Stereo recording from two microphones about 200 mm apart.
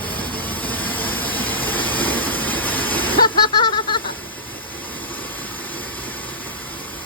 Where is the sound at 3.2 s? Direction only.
25° left (ahead or behind).